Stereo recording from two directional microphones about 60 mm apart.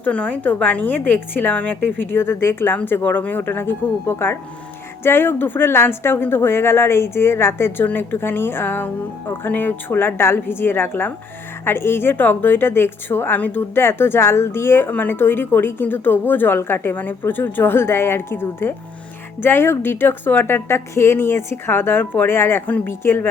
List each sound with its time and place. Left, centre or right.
0.0 s a woman's voice: left
22.7 s a woman's voice: left
23.0 s a woman's voice: left